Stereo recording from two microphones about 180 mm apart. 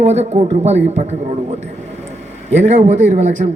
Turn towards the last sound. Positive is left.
turn(degrees=-40)  # may be behind; listen again after turning